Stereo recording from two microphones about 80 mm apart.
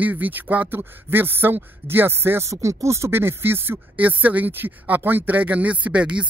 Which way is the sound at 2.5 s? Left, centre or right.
Right.